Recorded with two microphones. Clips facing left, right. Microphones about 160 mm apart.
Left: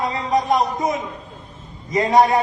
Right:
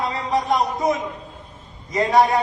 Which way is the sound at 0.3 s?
20° left (ahead or behind).